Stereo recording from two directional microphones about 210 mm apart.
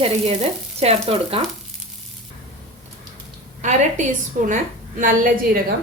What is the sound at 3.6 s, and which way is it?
A woman's voice, 35° right (ahead or behind).